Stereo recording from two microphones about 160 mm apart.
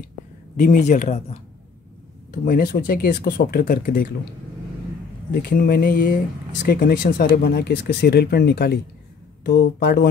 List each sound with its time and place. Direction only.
0.6 s speech: 55° left (ahead or behind)
2.4 s speech: 60° left (ahead or behind)
5.3 s speech: 70° left (ahead or behind); by 10.0 s 90° left